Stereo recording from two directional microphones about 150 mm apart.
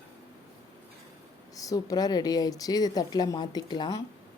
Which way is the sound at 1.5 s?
25° left (ahead or behind).